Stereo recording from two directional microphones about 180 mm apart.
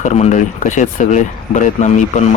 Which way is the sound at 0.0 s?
40° left (ahead or behind).